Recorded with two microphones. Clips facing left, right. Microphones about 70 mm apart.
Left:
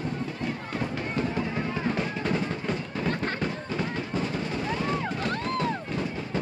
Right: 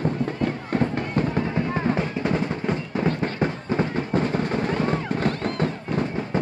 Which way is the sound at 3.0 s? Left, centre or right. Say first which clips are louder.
Right 4 dB; right.